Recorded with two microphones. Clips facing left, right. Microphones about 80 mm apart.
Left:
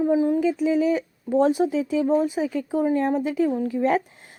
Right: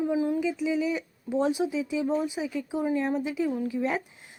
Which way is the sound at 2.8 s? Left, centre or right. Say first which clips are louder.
Left 5 dB; left.